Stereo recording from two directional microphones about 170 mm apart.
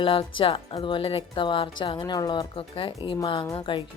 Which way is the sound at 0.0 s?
30° left (ahead or behind).